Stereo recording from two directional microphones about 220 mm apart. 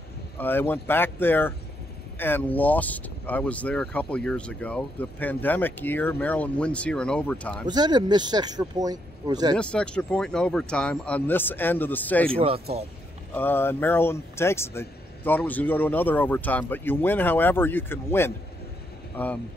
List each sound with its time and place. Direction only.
0.4 s speech: 10° left (ahead or behind)
7.6 s speech: 20° right (ahead or behind)
9.6 s speech: 5° left (ahead or behind)
12.3 s speech: 25° right (ahead or behind)
13.3 s speech: 10° left (ahead or behind)